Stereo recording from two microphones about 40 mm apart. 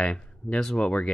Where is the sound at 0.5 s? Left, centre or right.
Centre.